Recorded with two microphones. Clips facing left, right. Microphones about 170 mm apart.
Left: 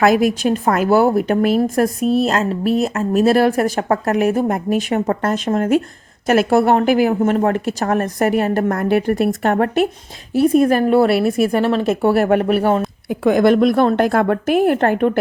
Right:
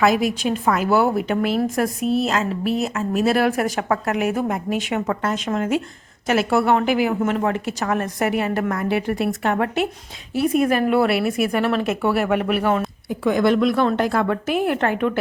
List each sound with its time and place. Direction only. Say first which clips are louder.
0.0 s a woman's voice: left 4 dB; 50° left (ahead or behind)
13.1 s a woman's voice: left 5 dB; 50° left (ahead or behind)